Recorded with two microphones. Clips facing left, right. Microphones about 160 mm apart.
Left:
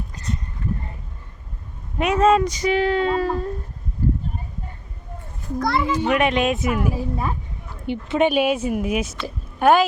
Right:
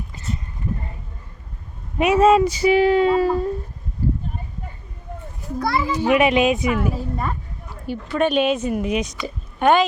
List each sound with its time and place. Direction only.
0.1 s a sound: 5° right (ahead or behind)
2.0 s speech: 5° right (ahead or behind)
5.5 s a child's voice: 5° right (ahead or behind)
6.7 s speech: 10° left (ahead or behind)
7.9 s speech: 20° left (ahead or behind)
8.3 s a woman's voice: 10° left (ahead or behind)